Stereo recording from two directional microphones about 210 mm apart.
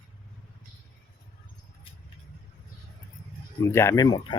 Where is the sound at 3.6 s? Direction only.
15° left (ahead or behind).